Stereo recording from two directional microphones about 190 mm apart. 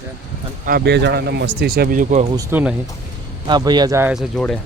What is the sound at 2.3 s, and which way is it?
Speech, 15° right (ahead or behind).